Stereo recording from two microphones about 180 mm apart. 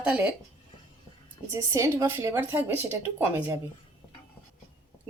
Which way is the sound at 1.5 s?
15° right (ahead or behind).